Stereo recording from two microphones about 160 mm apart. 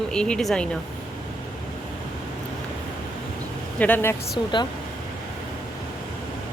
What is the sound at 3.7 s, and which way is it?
Speech, 10° left (ahead or behind).